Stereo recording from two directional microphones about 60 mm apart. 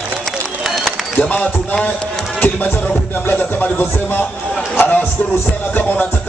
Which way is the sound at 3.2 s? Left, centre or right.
Left.